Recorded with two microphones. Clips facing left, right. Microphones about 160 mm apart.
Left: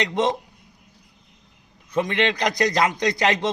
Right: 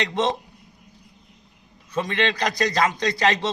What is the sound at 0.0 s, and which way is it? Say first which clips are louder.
Speech: left 1 dB; 15° left (ahead or behind).